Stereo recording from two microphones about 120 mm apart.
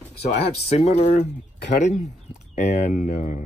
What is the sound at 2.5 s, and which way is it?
Speech, 90° left.